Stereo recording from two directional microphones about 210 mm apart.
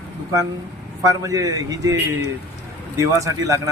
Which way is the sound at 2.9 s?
15° right (ahead or behind).